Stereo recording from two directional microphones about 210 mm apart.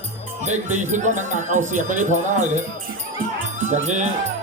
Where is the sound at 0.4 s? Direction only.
35° right (ahead or behind).